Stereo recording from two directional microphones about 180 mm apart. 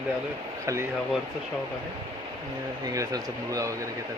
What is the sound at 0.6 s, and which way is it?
Speech, 15° right (ahead or behind).